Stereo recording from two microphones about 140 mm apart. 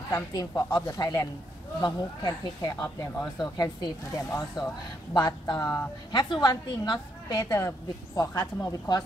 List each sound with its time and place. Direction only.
0.1 s a woman's voice: 25° left (ahead or behind)